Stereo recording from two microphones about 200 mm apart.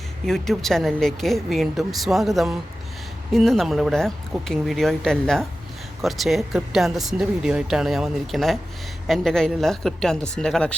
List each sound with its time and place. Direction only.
0.3 s speech: centre (ahead or behind)